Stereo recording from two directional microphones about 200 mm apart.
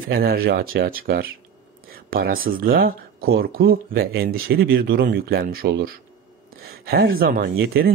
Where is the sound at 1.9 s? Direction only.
45° right (ahead or behind).